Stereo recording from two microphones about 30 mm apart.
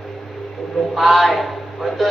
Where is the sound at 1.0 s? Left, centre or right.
Centre.